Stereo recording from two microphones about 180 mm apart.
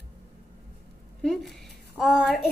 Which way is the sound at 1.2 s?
Centre (ahead or behind).